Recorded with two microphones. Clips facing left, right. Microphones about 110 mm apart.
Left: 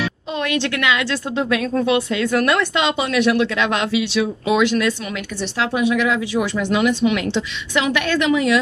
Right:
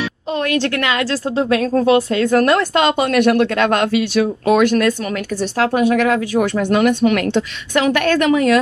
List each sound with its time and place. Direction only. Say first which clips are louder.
0.4 s a woman's voice: right 3 dB; 40° right (ahead or behind)